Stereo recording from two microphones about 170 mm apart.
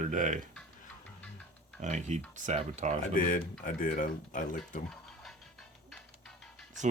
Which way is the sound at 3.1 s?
55° left (ahead or behind).